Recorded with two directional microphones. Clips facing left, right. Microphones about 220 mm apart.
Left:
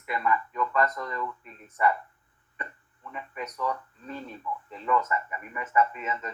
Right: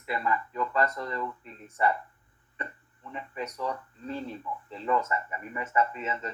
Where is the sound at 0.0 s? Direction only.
30° right (ahead or behind).